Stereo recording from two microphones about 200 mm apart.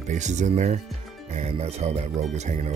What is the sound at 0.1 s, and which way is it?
Speech, 35° right (ahead or behind).